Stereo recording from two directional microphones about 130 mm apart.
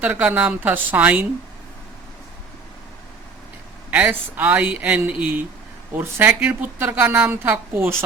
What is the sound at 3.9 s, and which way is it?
Speech, 10° right (ahead or behind).